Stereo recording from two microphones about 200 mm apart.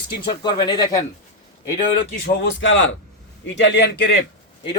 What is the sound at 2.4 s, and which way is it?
A man's voice, 65° left (ahead or behind).